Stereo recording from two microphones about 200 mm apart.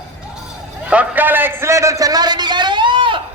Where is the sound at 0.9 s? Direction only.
10° right (ahead or behind).